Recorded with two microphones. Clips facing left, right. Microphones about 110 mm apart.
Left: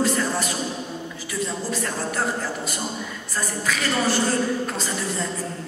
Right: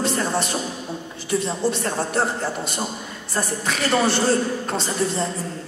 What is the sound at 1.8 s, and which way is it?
A woman's voice, 30° right (ahead or behind).